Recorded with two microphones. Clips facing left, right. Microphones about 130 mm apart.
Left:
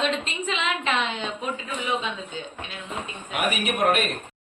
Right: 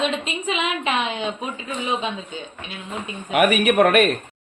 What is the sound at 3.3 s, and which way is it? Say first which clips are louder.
Speech: right 9 dB; 70° right (ahead or behind).